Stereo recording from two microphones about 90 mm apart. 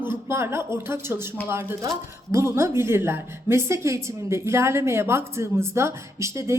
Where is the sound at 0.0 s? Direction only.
30° right (ahead or behind).